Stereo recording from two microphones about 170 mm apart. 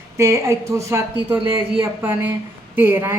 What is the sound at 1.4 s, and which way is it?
Speech, 30° right (ahead or behind).